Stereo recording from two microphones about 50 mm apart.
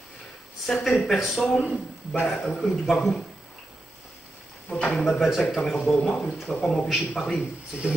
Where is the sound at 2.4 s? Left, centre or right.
Left.